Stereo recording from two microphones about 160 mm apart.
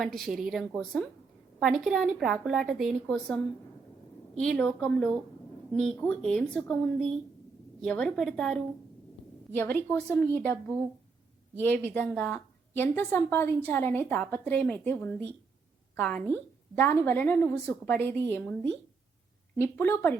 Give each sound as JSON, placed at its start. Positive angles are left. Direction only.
{"t": 0.0, "sound": "a woman's voice", "side_deg": 0}
{"t": 4.4, "sound": "a woman's voice", "side_deg": 5}
{"t": 9.6, "sound": "a woman's voice", "side_deg": 10}